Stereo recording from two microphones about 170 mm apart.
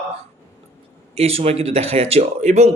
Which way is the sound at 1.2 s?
35° right (ahead or behind).